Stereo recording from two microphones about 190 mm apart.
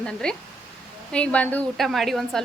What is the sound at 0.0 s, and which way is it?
A woman's voice, 5° left (ahead or behind).